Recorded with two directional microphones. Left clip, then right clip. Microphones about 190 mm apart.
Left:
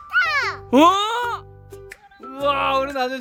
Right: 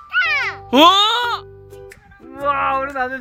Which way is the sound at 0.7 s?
10° left (ahead or behind).